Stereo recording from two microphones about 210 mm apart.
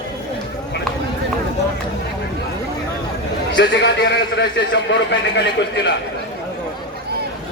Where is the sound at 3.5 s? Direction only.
55° left (ahead or behind).